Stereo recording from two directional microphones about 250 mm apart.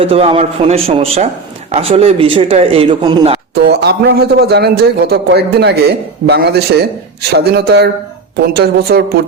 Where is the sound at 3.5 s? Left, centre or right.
Right.